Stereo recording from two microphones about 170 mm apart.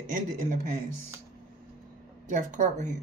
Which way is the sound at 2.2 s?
50° right (ahead or behind).